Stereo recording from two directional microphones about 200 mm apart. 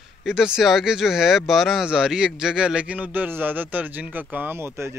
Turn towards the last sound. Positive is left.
turn(degrees=-15)  # may be behind; listen again after turning